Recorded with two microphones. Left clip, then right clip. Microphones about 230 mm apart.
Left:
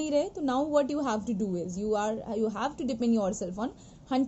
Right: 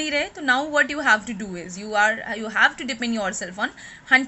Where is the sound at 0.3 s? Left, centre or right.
Centre.